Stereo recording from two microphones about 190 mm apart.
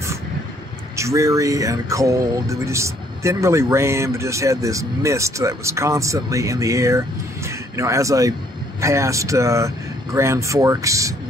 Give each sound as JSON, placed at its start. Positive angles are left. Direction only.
{"t": 0.9, "sound": "speech", "side_deg": -15}